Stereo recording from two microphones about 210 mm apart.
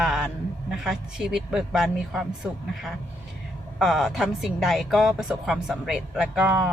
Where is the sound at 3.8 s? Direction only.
Centre (ahead or behind).